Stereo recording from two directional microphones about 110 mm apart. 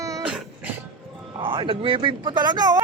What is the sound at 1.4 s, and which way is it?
Speech, 50° right (ahead or behind).